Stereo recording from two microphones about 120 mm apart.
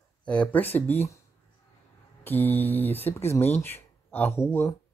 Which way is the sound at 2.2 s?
15° left (ahead or behind).